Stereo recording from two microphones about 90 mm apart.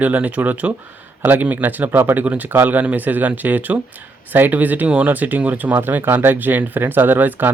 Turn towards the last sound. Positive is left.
turn(degrees=-20)  # may be behind; listen again after turning